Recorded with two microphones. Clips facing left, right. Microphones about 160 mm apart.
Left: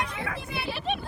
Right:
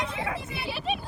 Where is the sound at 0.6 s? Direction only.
Centre (ahead or behind).